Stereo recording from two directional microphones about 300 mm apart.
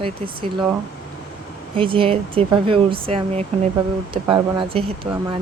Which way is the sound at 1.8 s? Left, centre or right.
Centre.